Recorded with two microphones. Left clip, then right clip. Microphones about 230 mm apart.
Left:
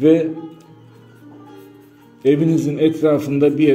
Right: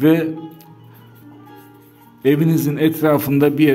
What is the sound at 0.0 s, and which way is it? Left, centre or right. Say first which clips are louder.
Speech: left 2 dB; right.